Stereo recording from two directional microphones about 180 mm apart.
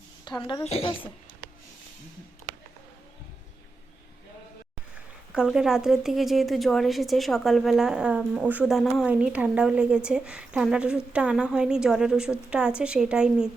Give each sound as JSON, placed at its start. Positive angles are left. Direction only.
{"t": 0.3, "sound": "a woman's voice", "side_deg": 25}
{"t": 5.3, "sound": "a woman's voice", "side_deg": -5}